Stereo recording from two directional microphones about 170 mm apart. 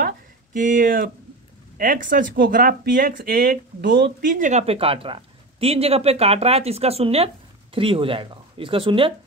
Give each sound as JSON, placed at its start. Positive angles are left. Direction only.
{"t": 0.0, "sound": "a sound", "side_deg": -50}
{"t": 1.8, "sound": "speech", "side_deg": -55}
{"t": 3.8, "sound": "speech", "side_deg": -85}
{"t": 4.3, "sound": "speech", "side_deg": -45}